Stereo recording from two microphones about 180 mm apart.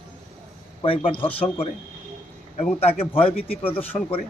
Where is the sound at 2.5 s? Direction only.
35° left (ahead or behind).